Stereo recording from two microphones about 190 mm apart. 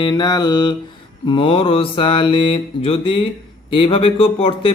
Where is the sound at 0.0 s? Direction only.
20° left (ahead or behind).